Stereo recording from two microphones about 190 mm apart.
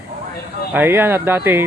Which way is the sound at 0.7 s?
10° right (ahead or behind).